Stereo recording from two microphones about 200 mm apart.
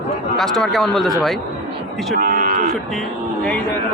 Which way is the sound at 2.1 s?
45° right (ahead or behind).